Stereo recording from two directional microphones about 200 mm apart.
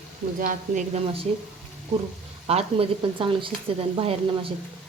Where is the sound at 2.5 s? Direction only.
30° right (ahead or behind).